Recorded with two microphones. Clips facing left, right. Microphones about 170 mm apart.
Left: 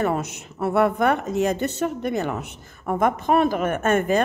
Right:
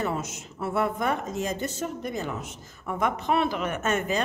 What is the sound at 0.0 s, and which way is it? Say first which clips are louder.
A woman's voice: left 6 dB; 60° left (ahead or behind).